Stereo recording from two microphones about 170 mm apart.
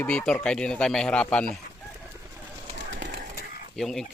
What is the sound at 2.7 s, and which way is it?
Bird, 90° right.